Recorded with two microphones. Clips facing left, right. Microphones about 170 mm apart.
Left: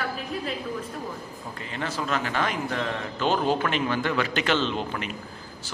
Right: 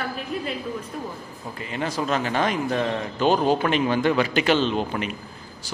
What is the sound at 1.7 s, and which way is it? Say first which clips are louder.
A man's voice: right 4 dB; 15° right (ahead or behind).